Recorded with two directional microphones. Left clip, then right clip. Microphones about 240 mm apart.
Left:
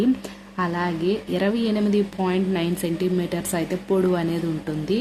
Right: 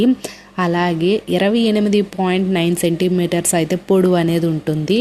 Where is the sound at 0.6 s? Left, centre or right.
Right.